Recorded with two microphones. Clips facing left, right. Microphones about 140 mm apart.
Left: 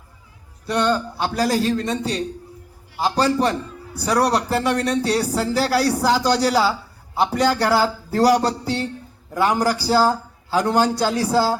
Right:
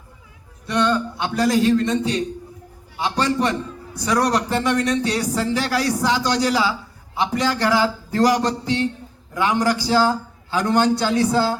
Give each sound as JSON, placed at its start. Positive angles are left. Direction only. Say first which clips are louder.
{"t": 0.7, "sound": "speech", "louder": "even", "side_deg": 35}
{"t": 3.0, "sound": "a man's voice", "louder": "left 2 dB", "side_deg": 35}